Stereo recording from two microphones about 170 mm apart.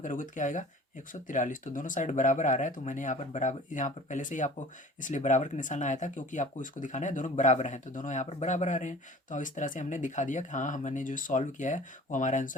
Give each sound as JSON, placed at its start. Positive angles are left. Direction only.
{"t": 0.0, "sound": "speech", "side_deg": 50}